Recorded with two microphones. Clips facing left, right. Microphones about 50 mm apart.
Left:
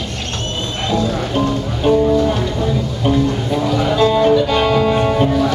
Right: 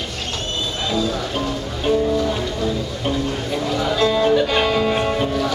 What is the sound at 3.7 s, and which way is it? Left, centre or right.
Music, centre.